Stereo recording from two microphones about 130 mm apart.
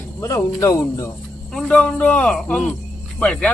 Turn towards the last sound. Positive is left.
turn(degrees=10)  # may be behind; listen again after turning